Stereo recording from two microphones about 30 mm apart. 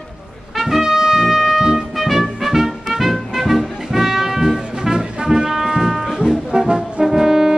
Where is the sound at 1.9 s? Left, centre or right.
Centre.